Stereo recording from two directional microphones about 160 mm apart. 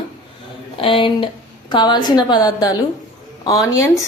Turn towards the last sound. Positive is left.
turn(degrees=20)  # may be behind; listen again after turning